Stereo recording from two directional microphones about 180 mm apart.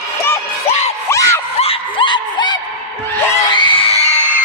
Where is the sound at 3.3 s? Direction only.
25° left (ahead or behind).